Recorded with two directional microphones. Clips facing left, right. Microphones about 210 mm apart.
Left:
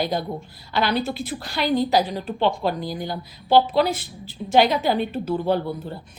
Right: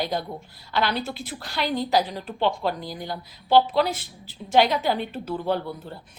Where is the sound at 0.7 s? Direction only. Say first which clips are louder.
Left 3 dB; 10° left (ahead or behind).